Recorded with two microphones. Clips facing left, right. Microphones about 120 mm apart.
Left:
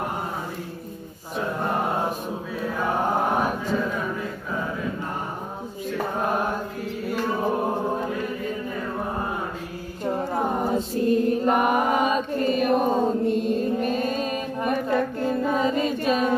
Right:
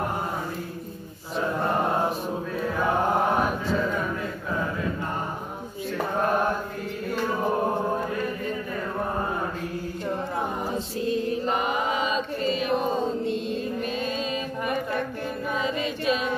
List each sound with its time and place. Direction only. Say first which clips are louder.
10.0 s mantra: left 5 dB; 40° left (ahead or behind)
10.6 s mantra: left 5 dB; 50° left (ahead or behind)
15.5 s a sound: left 5 dB; 40° left (ahead or behind)